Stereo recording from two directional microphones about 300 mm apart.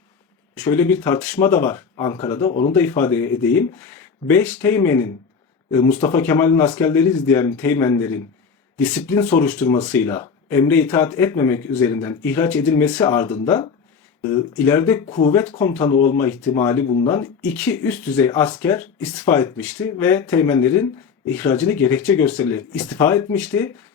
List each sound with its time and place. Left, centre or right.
0.5 s speech: centre
2.7 s speech: centre